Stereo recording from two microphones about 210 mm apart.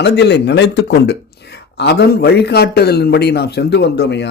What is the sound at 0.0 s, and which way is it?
Speech, 55° left (ahead or behind).